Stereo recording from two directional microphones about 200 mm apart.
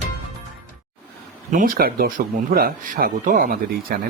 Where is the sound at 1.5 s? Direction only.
45° right (ahead or behind).